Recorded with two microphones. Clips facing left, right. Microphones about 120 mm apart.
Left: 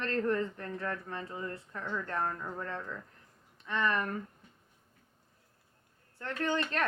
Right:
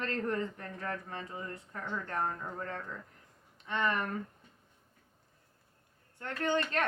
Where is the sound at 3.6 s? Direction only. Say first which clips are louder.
Left 1 dB; 20° right (ahead or behind).